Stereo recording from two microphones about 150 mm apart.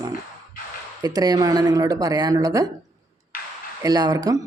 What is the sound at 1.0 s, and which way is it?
Speech, 25° right (ahead or behind).